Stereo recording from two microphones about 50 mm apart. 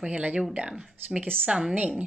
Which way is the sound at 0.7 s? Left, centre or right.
Centre.